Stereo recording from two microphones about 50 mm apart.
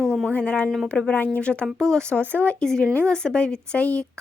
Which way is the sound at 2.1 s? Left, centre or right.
Left.